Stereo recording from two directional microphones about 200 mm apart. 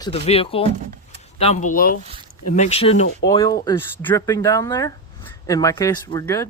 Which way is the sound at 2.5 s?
35° left (ahead or behind).